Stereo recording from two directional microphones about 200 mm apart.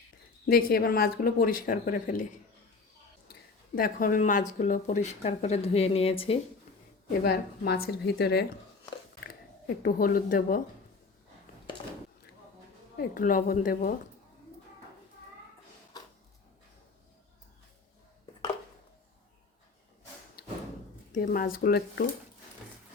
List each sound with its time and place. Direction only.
0.4 s speech: 50° left (ahead or behind)
3.8 s speech: 45° left (ahead or behind); by 6.4 s 30° left (ahead or behind)
7.2 s speech: 55° left (ahead or behind)
9.8 s speech: 45° left (ahead or behind)
13.0 s speech: 45° left (ahead or behind)
21.1 s speech: 40° left (ahead or behind)